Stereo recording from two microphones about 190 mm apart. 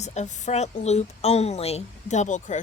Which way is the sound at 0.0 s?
35° left (ahead or behind).